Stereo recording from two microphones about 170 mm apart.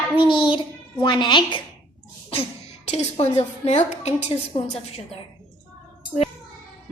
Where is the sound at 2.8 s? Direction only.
40° left (ahead or behind).